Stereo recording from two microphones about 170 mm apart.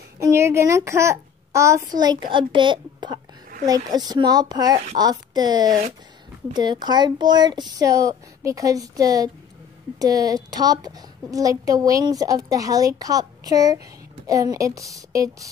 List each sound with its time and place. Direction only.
0.2 s a child's voice: 15° right (ahead or behind)